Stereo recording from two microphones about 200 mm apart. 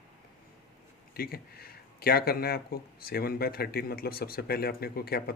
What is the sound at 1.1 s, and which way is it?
Speech, 50° left (ahead or behind).